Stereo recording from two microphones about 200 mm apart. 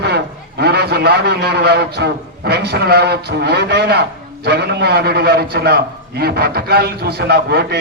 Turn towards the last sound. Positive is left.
turn(degrees=-50)  # may be behind; listen again after turning